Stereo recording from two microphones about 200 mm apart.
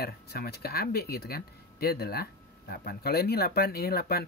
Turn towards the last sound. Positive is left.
turn(degrees=50)  # may be behind; listen again after turning